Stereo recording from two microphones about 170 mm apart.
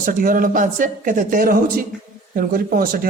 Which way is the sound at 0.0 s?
55° right (ahead or behind).